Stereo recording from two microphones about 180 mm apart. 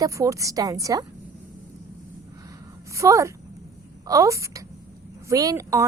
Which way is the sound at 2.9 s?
15° right (ahead or behind).